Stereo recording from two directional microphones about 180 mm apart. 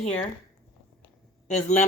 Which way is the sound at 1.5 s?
40° left (ahead or behind).